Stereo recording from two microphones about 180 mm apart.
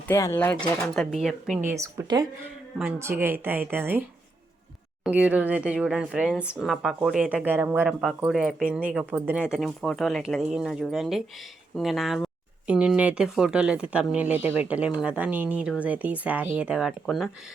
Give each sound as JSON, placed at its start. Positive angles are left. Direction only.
{"t": 0.1, "sound": "speech", "side_deg": 15}
{"t": 0.9, "sound": "a woman's voice", "side_deg": 0}
{"t": 1.6, "sound": "speech", "side_deg": -15}
{"t": 5.0, "sound": "a woman's voice", "side_deg": -5}